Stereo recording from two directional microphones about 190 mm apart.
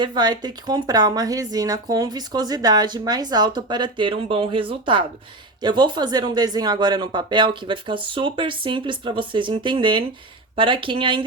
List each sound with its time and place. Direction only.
0.0 s speech: 25° right (ahead or behind)